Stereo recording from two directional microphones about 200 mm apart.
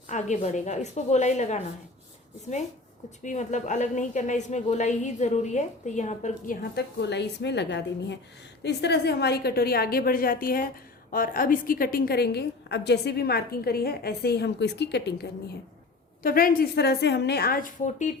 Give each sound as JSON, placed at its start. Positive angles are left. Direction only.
{"t": 0.1, "sound": "a woman's voice", "side_deg": 35}
{"t": 3.2, "sound": "a woman's voice", "side_deg": 35}
{"t": 16.2, "sound": "a woman's voice", "side_deg": 45}